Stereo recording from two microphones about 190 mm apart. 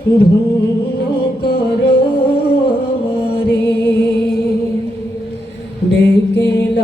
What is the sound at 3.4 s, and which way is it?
Music, 60° left (ahead or behind).